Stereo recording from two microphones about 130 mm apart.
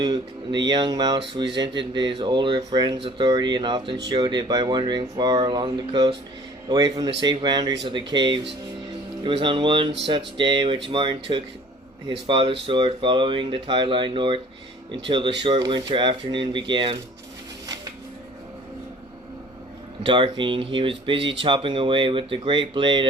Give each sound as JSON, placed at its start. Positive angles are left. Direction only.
{"t": 0.0, "sound": "speech", "side_deg": -30}
{"t": 20.0, "sound": "speech", "side_deg": -40}